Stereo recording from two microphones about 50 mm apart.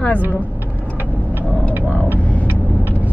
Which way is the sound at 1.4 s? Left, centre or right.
Left.